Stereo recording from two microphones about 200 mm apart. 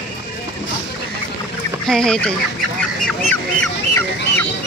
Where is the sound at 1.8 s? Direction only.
5° left (ahead or behind).